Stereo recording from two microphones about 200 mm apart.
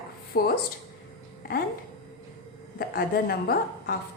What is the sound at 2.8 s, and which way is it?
A woman's voice, 50° left (ahead or behind).